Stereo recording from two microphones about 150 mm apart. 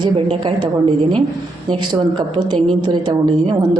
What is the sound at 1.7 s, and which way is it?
A woman's voice, 35° right (ahead or behind).